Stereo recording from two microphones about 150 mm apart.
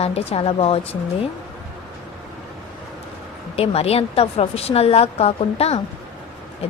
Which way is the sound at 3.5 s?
40° left (ahead or behind).